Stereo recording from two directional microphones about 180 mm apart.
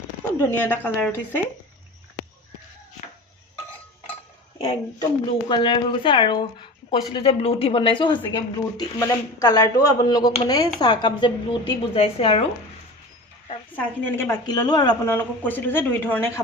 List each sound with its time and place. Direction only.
0.5 s speech: 10° left (ahead or behind)
4.5 s speech: 30° left (ahead or behind)
13.7 s speech: 10° left (ahead or behind)